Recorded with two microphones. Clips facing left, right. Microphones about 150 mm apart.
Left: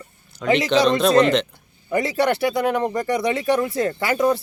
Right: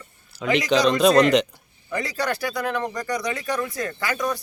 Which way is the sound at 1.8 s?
25° left (ahead or behind).